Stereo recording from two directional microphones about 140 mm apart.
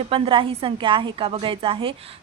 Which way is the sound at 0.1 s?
40° right (ahead or behind).